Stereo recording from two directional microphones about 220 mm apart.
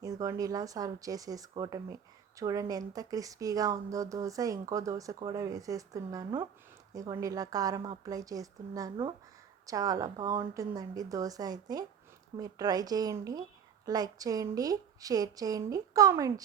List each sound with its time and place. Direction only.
0.0 s speech: 15° right (ahead or behind)